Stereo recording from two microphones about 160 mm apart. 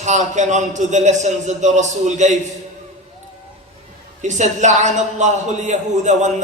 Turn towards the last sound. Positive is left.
turn(degrees=-50)  # may be behind; listen again after turning